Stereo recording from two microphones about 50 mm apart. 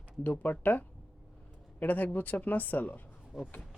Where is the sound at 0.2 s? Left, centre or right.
Left.